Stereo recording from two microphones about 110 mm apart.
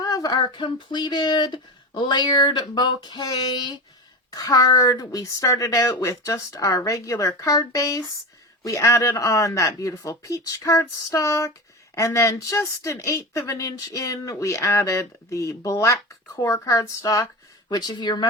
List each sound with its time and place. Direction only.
0.0 s a sound: 35° left (ahead or behind)
0.3 s speech: 45° left (ahead or behind)
4.3 s a woman's voice: 30° left (ahead or behind)
17.7 s a woman's voice: 40° left (ahead or behind)